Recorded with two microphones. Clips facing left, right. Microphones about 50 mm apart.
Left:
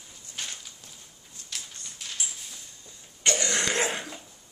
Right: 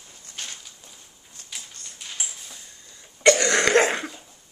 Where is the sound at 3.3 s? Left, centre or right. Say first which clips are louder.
Right 9 dB; right.